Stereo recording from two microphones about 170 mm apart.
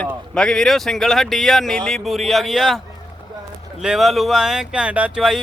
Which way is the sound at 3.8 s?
Centre (ahead or behind).